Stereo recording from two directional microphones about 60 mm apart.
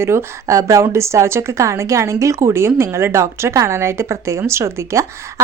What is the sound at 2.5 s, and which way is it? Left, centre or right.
A woman's voice, right.